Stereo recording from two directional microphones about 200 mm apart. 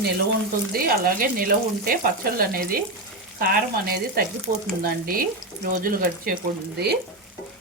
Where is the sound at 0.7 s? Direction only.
45° right (ahead or behind).